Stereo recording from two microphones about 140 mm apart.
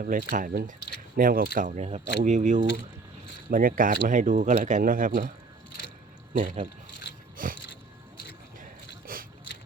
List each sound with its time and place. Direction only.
0.0 s speech: 75° right (ahead or behind)
3.5 s speech: 85° right
6.3 s speech: 60° right (ahead or behind)
7.3 s biting: 80° right
9.1 s a sound: 90° right